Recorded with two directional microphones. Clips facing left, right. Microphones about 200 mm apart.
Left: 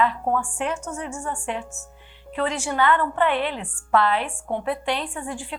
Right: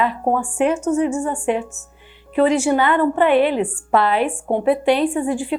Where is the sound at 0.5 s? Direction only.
10° right (ahead or behind).